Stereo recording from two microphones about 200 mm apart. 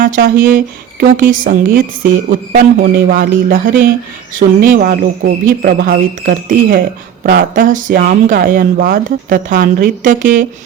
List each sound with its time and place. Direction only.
0.0 s speech: 45° right (ahead or behind)